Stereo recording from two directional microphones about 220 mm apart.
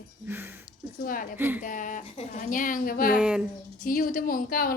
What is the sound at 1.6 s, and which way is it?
Speech, 35° left (ahead or behind).